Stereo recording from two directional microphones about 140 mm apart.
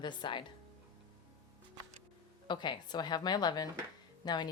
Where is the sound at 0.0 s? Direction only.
35° left (ahead or behind).